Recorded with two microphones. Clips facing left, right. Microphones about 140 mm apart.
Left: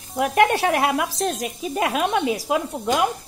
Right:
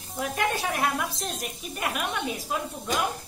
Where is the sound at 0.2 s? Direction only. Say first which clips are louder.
Left 10 dB; 75° left (ahead or behind).